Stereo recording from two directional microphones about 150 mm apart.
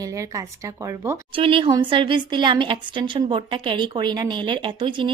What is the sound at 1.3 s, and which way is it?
A woman's voice, 35° right (ahead or behind).